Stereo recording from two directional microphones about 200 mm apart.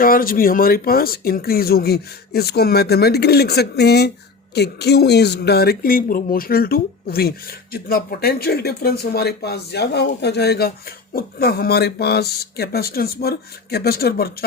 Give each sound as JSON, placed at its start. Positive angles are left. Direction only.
{"t": 0.0, "sound": "speech", "side_deg": 45}